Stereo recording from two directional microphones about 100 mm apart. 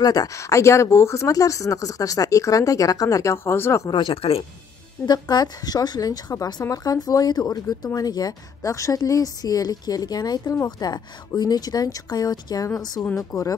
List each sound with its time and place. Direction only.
0.0 s speech: 40° left (ahead or behind)
3.9 s speech: 60° left (ahead or behind)
5.3 s speech: 40° left (ahead or behind)